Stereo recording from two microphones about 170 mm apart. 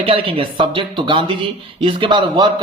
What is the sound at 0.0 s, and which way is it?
A man's voice, 30° right (ahead or behind).